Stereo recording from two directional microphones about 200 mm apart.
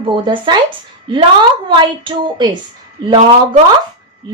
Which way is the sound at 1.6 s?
25° right (ahead or behind).